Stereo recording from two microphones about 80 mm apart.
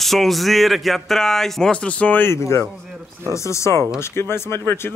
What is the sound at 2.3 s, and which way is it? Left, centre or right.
Speech, left.